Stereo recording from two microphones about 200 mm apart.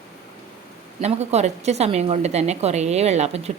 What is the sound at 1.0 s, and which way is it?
Speech, 35° right (ahead or behind).